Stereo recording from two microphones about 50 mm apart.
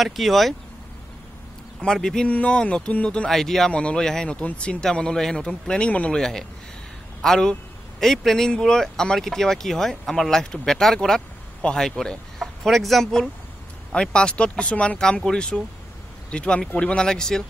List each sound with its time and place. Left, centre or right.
0.0 s speech: centre
2.0 s speech: centre
2.2 s speech: left
3.3 s speech: centre
3.7 s speech: left
4.0 s speech: centre
4.3 s speech: left
5.9 s speech: left
6.1 s a man's voice: centre
13.9 s speech: centre
15.0 s speech: centre